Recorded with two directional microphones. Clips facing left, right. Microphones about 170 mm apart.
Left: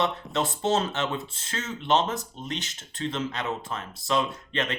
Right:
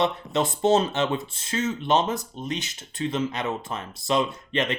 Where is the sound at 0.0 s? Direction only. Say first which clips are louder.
Right 3 dB; 15° right (ahead or behind).